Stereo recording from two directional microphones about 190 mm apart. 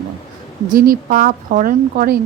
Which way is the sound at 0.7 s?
50° right (ahead or behind).